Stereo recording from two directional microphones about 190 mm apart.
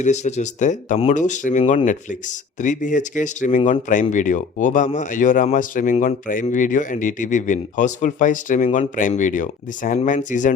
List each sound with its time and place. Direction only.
0.0 s speech: 35° left (ahead or behind)